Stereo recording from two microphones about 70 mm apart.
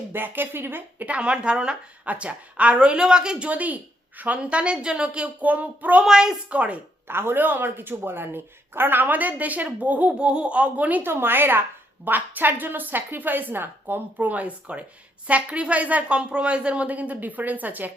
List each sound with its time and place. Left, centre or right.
0.1 s speech: right
6.1 s speech: centre
6.5 s a woman's voice: centre
7.1 s a woman's voice: right